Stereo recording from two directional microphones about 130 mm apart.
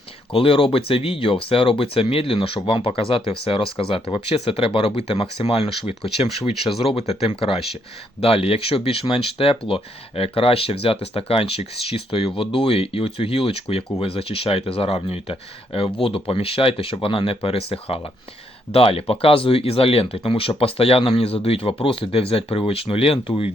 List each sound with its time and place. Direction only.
0.3 s speech: 45° left (ahead or behind)